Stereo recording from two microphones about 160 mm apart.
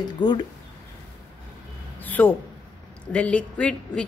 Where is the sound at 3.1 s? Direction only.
5° left (ahead or behind).